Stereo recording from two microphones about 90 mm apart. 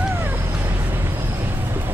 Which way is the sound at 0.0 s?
20° right (ahead or behind).